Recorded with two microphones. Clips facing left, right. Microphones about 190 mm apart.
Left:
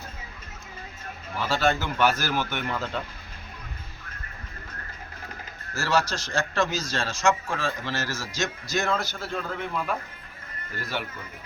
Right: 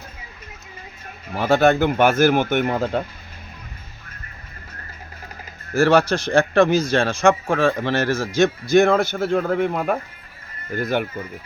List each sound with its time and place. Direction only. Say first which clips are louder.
1.3 s speech: right 9 dB; 55° right (ahead or behind)
5.7 s speech: right 10 dB; 55° right (ahead or behind)